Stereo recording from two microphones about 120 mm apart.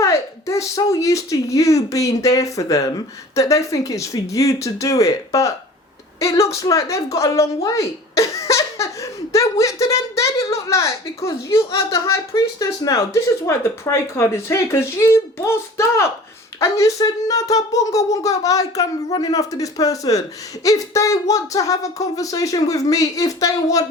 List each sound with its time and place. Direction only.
0.0 s speech: 25° left (ahead or behind)